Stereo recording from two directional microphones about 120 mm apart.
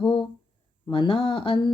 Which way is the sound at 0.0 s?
45° left (ahead or behind).